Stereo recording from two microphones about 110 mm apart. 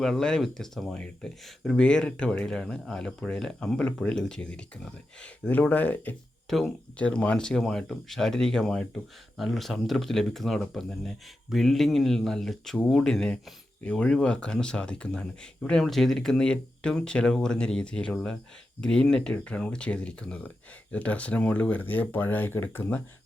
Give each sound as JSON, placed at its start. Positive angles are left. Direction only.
{"t": 0.0, "sound": "speech", "side_deg": 5}
{"t": 6.5, "sound": "speech", "side_deg": 0}
{"t": 7.0, "sound": "speech", "side_deg": 10}